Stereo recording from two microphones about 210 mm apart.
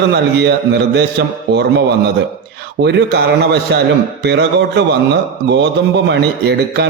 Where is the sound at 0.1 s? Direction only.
50° right (ahead or behind).